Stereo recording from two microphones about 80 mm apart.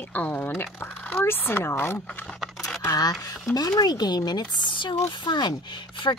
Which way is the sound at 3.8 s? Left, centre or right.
Left.